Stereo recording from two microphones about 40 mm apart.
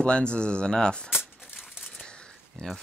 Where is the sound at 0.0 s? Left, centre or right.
Left.